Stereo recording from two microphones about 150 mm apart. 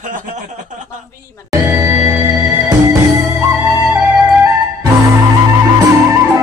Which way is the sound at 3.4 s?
10° right (ahead or behind).